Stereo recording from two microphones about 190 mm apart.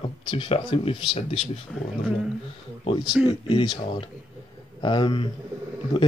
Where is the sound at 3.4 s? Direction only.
25° left (ahead or behind).